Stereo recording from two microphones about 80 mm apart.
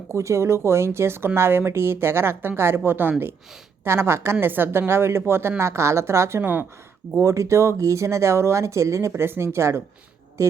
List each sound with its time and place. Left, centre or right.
0.1 s a woman's voice: right
7.2 s a woman's voice: right